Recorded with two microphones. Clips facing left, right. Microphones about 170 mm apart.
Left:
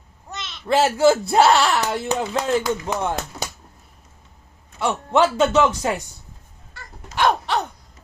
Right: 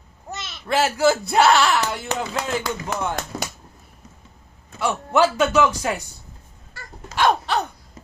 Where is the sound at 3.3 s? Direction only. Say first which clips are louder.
Right 2 dB; 90° right.